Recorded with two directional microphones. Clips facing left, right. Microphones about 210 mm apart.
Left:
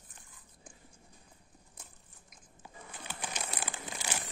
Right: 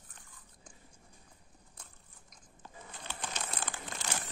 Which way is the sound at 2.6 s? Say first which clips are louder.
Even; 10° left (ahead or behind).